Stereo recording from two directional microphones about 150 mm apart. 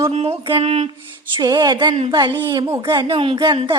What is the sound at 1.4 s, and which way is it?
Speech, 25° right (ahead or behind).